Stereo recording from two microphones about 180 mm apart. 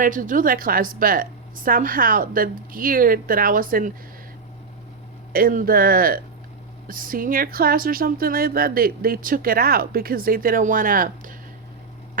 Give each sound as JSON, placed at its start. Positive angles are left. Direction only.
{"t": 0.0, "sound": "speech", "side_deg": -45}
{"t": 5.3, "sound": "speech", "side_deg": -55}